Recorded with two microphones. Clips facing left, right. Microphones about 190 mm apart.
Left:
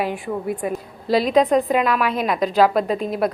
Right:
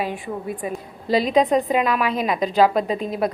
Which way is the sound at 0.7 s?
5° left (ahead or behind).